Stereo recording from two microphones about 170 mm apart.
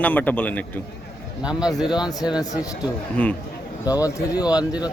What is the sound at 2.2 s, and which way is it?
Speech, 25° left (ahead or behind).